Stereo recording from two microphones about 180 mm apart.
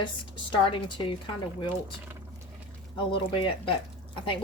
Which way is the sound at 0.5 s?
30° left (ahead or behind).